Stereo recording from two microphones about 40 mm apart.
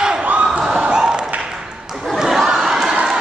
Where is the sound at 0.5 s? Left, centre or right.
Centre.